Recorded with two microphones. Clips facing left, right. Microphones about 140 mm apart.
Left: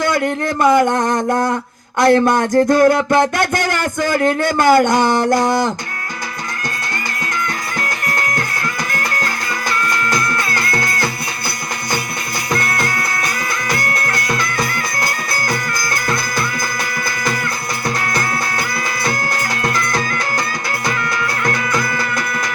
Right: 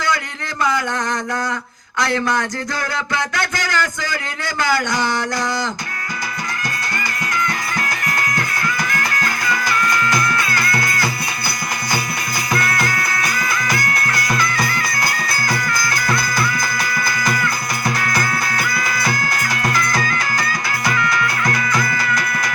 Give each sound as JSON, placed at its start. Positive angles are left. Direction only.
{"t": 0.6, "sound": "speech", "side_deg": 50}
{"t": 0.9, "sound": "mantra", "side_deg": 30}
{"t": 2.0, "sound": "speech", "side_deg": 50}
{"t": 13.7, "sound": "music", "side_deg": 25}
{"t": 18.0, "sound": "music", "side_deg": 30}
{"t": 20.9, "sound": "music", "side_deg": 40}